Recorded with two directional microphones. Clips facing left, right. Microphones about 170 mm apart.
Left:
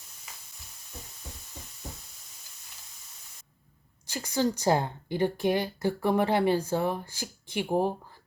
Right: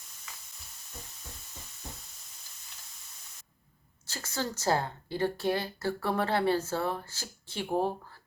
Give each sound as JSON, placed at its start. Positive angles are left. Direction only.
{"t": 4.0, "sound": "a woman's voice", "side_deg": 15}